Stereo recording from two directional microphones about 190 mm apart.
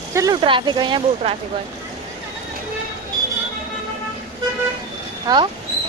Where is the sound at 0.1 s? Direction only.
15° right (ahead or behind).